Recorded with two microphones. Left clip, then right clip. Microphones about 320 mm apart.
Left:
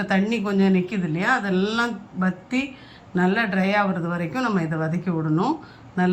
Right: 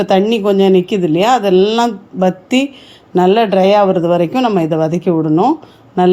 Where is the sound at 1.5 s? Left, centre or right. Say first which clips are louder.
Right 14 dB; centre.